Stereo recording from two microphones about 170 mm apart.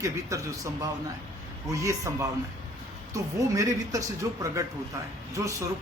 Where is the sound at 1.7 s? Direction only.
20° right (ahead or behind).